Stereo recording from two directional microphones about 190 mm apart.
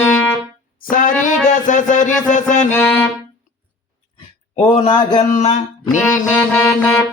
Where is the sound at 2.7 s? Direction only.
10° left (ahead or behind).